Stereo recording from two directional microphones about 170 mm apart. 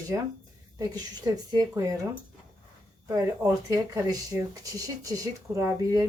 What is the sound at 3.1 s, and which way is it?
Speech, 20° right (ahead or behind).